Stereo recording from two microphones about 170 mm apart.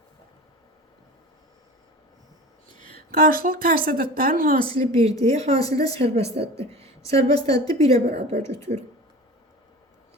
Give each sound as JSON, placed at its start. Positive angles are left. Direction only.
{"t": 2.8, "sound": "a woman's voice", "side_deg": -60}
{"t": 4.7, "sound": "a woman's voice", "side_deg": -40}
{"t": 7.5, "sound": "a woman's voice", "side_deg": 20}
{"t": 7.8, "sound": "a woman's voice", "side_deg": -40}
{"t": 8.4, "sound": "speech", "side_deg": 15}